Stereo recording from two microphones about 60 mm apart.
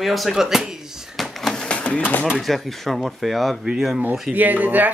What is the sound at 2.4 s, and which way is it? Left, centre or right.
Speech, centre.